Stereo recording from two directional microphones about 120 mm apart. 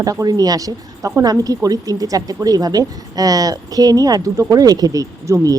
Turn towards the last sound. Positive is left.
turn(degrees=-30)  # may be behind; listen again after turning